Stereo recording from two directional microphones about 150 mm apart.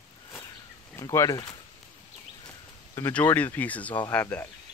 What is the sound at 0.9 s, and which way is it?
Speech, 20° left (ahead or behind).